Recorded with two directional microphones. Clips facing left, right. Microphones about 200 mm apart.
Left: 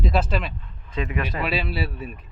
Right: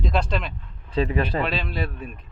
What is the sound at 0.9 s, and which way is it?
Speech, 30° right (ahead or behind).